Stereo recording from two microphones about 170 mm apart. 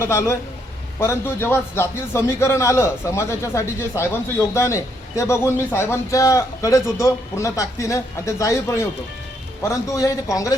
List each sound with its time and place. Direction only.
0.0 s a man's voice: 15° left (ahead or behind)